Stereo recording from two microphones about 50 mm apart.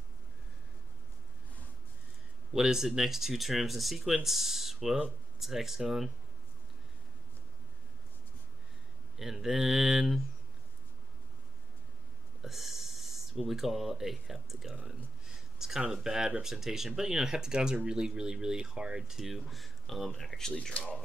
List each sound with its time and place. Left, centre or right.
2.5 s speech: centre
9.1 s speech: centre
12.4 s speech: centre
15.2 s a sound: centre
15.9 s speech: centre
20.7 s speech: left